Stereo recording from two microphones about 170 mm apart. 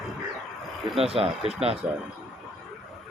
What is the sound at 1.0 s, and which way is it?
Speech, 35° right (ahead or behind).